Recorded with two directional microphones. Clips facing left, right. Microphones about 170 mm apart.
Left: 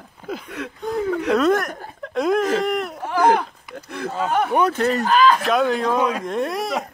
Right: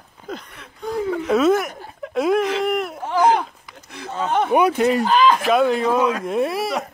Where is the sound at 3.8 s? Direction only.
55° left (ahead or behind).